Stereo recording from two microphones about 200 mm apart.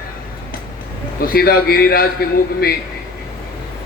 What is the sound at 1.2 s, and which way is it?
Speech, 50° left (ahead or behind).